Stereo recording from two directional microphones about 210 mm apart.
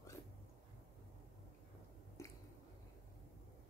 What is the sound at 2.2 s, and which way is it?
Squish, 15° left (ahead or behind).